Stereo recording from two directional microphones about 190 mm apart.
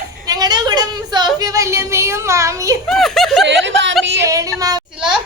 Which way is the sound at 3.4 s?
70° right (ahead or behind).